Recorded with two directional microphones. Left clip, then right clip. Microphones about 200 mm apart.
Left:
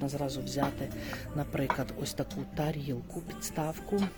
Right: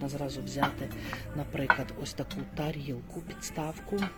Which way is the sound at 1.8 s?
10° left (ahead or behind).